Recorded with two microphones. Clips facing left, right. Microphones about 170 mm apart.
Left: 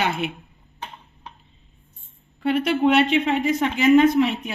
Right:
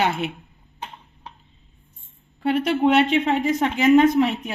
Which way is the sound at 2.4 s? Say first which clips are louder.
Even; 40° right (ahead or behind).